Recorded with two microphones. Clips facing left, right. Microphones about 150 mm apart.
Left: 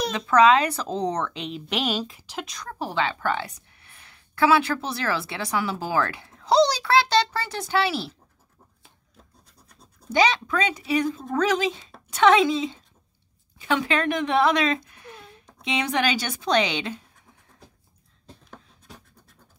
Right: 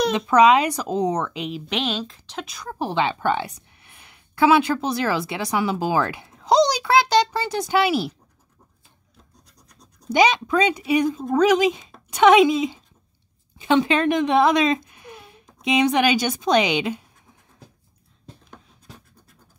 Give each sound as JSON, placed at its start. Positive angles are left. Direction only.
{"t": 0.1, "sound": "speech", "side_deg": -15}
{"t": 2.4, "sound": "speech", "side_deg": -5}
{"t": 2.7, "sound": "a woman's voice", "side_deg": -20}
{"t": 10.1, "sound": "speech", "side_deg": -15}